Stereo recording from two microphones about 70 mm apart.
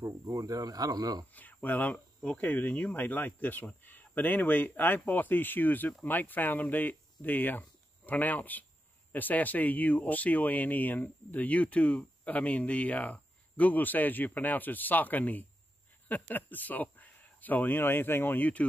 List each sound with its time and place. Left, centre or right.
0.0 s speech: right
1.3 s speech: left